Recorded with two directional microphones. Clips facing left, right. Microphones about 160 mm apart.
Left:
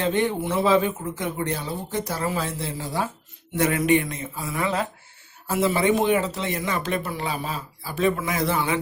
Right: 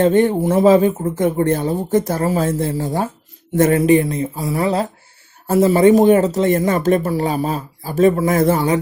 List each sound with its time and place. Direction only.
0.0 s speech: 45° right (ahead or behind)
3.8 s speech: 35° right (ahead or behind)